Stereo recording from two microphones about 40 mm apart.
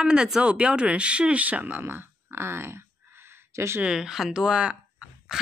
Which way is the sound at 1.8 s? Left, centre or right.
Right.